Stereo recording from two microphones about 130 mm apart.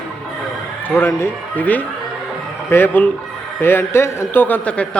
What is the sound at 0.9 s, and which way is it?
A man's voice, 15° left (ahead or behind).